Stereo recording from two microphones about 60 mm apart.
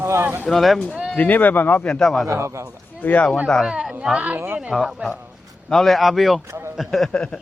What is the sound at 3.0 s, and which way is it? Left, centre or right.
Speech, left.